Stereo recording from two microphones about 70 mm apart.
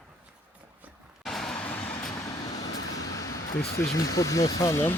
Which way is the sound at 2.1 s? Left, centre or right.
Left.